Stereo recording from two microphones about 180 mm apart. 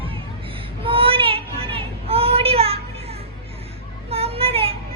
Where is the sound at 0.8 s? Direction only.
30° right (ahead or behind).